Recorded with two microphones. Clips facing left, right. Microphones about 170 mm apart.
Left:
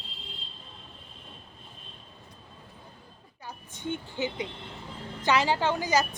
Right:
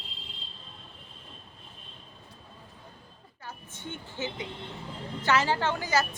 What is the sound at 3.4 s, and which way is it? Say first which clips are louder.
A woman's voice: left 6 dB; 15° left (ahead or behind).